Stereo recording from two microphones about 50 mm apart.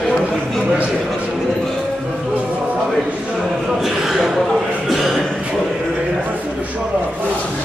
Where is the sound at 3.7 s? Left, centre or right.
Centre.